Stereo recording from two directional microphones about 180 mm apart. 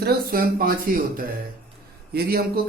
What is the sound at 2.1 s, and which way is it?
Speech, 60° right (ahead or behind).